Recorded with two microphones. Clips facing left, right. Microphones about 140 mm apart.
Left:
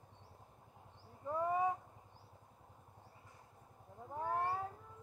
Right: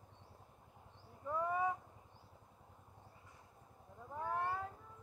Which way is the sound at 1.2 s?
30° left (ahead or behind).